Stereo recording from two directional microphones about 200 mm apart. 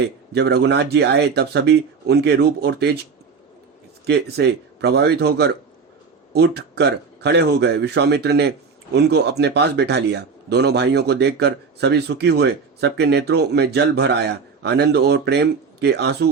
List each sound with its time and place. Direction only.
0.3 s speech: 55° right (ahead or behind)
4.0 s speech: 55° right (ahead or behind)